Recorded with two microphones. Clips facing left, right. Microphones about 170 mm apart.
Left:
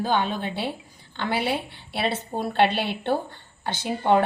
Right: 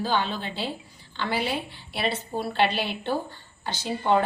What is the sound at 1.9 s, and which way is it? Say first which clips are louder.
A woman's voice: left 2 dB; 55° left (ahead or behind).